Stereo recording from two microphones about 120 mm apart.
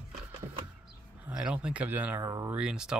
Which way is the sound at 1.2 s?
10° right (ahead or behind).